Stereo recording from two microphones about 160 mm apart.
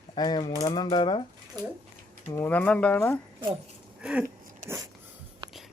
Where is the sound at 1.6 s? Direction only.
25° right (ahead or behind).